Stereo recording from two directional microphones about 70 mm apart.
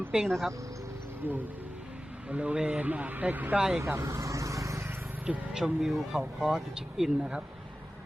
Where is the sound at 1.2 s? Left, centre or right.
Right.